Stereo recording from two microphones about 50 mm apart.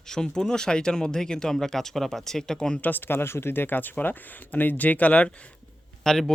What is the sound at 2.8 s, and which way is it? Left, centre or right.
Speech, left.